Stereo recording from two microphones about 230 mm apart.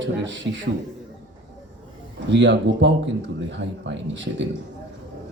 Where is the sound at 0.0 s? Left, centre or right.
Right.